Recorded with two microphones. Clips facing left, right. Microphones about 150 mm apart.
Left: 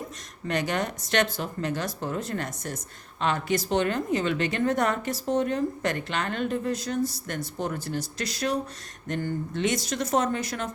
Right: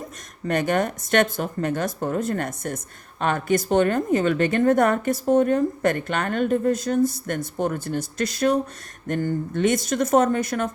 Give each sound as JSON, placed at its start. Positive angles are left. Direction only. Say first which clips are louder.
{"t": 0.4, "sound": "speech", "louder": "right 6 dB", "side_deg": -50}